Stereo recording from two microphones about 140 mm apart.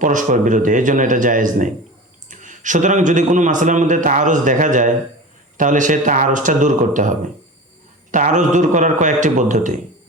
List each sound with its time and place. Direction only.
0.0 s a man's voice: 65° right (ahead or behind)
8.1 s a man's voice: 60° right (ahead or behind)